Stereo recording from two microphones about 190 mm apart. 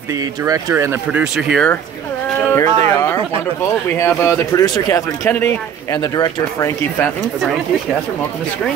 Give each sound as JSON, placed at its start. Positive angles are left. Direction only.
{"t": 0.1, "sound": "speech", "side_deg": -15}
{"t": 2.5, "sound": "a sound", "side_deg": 15}
{"t": 3.6, "sound": "a man's voice", "side_deg": 15}